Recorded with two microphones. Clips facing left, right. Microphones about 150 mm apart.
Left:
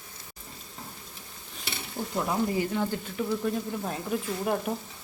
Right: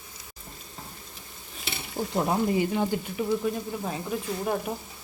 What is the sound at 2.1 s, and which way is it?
Speech, 25° right (ahead or behind).